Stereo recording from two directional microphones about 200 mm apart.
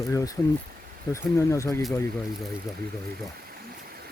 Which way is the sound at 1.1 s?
15° left (ahead or behind).